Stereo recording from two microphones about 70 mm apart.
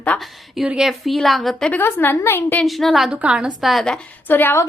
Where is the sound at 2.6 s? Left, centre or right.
Centre.